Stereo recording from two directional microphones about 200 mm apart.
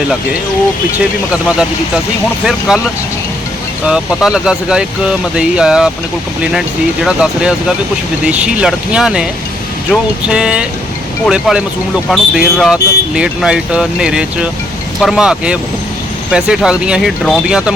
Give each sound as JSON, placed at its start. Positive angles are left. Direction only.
{"t": 0.9, "sound": "speech", "side_deg": -5}
{"t": 3.8, "sound": "speech", "side_deg": -5}